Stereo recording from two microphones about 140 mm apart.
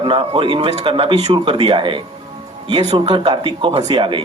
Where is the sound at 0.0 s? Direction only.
35° right (ahead or behind).